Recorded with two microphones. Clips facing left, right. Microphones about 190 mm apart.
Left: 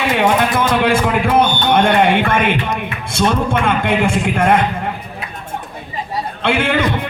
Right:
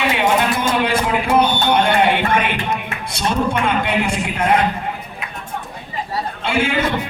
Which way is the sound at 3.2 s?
50° left (ahead or behind).